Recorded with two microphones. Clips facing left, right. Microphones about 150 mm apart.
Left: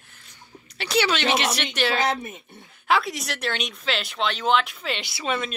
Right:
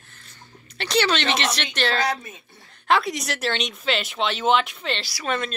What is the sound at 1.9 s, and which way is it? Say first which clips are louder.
Speech: left 1 dB; 20° left (ahead or behind).